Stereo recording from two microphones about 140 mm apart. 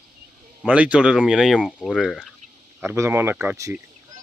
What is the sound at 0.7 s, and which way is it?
Speech, 10° right (ahead or behind).